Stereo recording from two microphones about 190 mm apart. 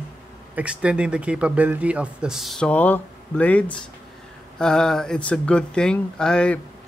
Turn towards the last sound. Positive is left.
turn(degrees=5)  # may be behind; listen again after turning